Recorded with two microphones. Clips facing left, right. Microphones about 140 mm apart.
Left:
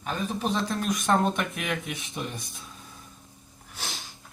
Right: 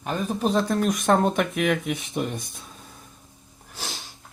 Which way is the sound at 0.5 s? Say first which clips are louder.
Right 6 dB; 50° right (ahead or behind).